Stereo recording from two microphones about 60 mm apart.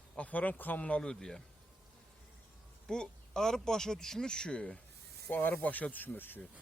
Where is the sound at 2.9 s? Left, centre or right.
Centre.